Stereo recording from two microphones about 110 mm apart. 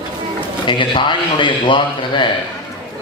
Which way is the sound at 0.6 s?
45° left (ahead or behind).